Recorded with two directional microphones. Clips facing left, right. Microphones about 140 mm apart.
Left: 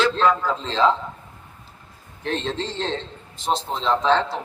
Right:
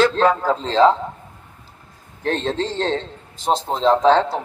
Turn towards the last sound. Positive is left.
turn(degrees=-45)  # may be behind; listen again after turning